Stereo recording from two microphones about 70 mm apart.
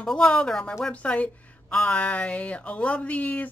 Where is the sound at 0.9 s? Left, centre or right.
Centre.